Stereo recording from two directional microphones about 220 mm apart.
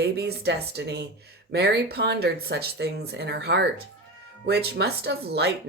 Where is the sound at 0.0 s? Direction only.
45° right (ahead or behind).